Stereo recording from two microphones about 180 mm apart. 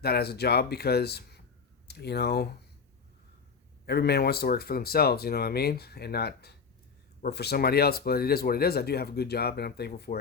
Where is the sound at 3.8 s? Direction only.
65° left (ahead or behind).